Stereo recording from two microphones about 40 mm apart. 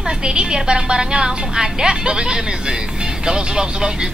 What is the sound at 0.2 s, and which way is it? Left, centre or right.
Speech, right.